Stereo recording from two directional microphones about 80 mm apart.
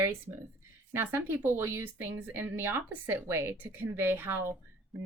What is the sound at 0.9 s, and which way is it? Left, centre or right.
A woman's voice, right.